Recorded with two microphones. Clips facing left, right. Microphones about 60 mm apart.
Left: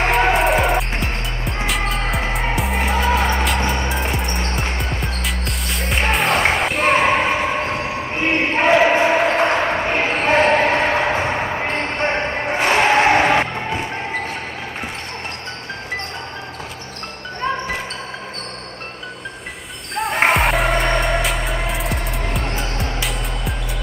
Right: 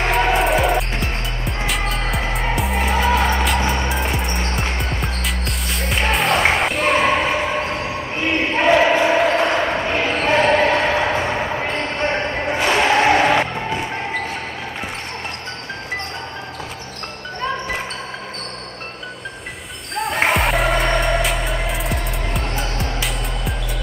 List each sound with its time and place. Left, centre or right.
0.4 s music: centre
7.3 s a sound: centre
8.1 s basketball bounce: left
12.5 s music: left
20.0 s music: centre